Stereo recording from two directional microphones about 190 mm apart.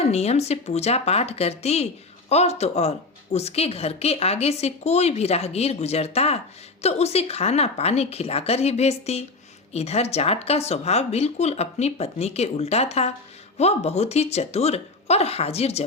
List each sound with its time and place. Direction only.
0.0 s speech: 35° left (ahead or behind)